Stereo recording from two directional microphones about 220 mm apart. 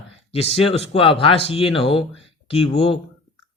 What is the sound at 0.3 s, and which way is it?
Speech, 25° left (ahead or behind).